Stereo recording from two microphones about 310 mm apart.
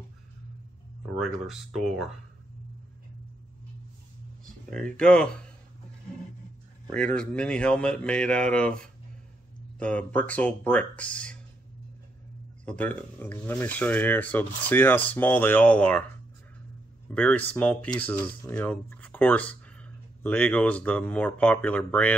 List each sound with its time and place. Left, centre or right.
1.1 s speech: centre
4.5 s speech: centre
6.9 s speech: centre
12.6 s speech: centre
17.1 s speech: centre